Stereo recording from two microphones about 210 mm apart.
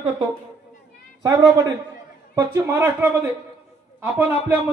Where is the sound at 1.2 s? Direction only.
15° right (ahead or behind).